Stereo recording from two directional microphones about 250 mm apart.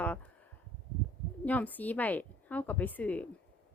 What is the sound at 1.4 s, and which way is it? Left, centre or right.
A woman's voice, centre.